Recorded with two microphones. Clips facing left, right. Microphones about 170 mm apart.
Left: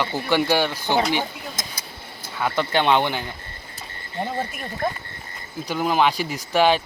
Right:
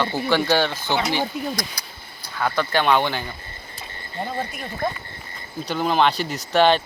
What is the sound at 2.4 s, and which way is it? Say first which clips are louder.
Speech: even; 20° left (ahead or behind).